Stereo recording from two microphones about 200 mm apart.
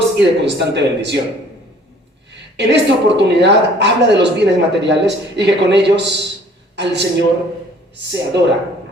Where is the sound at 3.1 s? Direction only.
60° right (ahead or behind).